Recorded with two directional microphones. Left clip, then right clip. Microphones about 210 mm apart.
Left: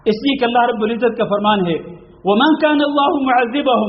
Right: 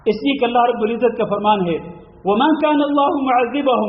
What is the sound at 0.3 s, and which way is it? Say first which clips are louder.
A man's voice: left 1 dB; 25° left (ahead or behind).